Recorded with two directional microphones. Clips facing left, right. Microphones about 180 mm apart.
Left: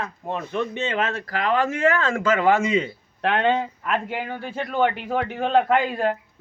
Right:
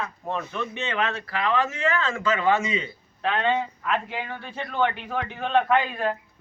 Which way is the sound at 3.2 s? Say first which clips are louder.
Left 4 dB; 60° left (ahead or behind).